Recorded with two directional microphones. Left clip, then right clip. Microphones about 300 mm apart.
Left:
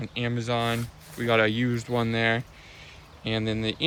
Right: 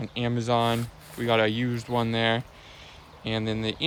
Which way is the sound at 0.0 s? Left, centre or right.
Centre.